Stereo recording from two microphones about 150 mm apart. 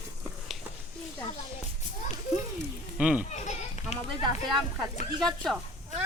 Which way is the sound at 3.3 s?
50° left (ahead or behind).